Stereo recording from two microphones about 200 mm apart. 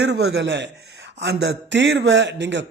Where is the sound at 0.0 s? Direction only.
55° right (ahead or behind).